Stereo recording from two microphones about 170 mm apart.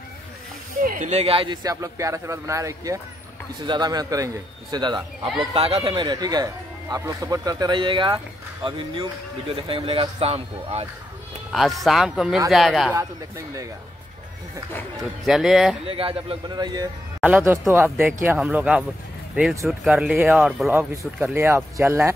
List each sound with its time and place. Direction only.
0.8 s speech: 45° right (ahead or behind)
5.9 s speech: 25° right (ahead or behind)
11.8 s speech: centre (ahead or behind)
15.2 s speech: centre (ahead or behind)
15.9 s speech: 30° right (ahead or behind)
17.2 s speech: 10° right (ahead or behind)
21.2 s speech: 10° right (ahead or behind)